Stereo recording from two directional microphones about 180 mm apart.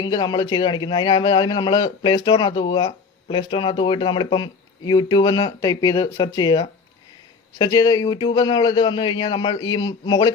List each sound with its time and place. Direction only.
0.0 s a man's voice: 25° left (ahead or behind)